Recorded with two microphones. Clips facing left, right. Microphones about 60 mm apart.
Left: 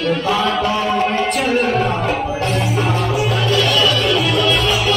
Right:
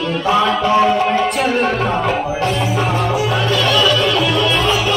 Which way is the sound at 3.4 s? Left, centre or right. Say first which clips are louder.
Even; right.